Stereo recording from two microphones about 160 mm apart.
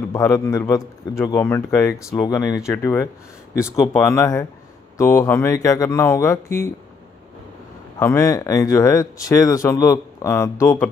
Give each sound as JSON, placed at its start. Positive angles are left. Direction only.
{"t": 0.1, "sound": "a man's voice", "side_deg": 20}
{"t": 8.0, "sound": "a man's voice", "side_deg": 15}